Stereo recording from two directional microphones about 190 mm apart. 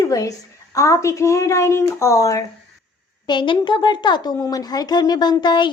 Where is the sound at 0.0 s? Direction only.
15° left (ahead or behind).